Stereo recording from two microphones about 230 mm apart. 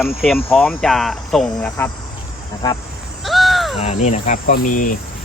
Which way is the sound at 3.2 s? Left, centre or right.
Centre.